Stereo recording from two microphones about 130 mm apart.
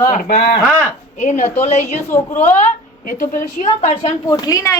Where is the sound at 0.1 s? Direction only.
85° left.